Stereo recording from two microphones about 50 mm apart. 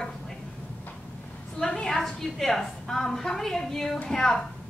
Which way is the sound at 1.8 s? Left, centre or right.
Centre.